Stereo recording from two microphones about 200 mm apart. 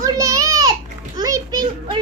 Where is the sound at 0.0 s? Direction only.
15° right (ahead or behind).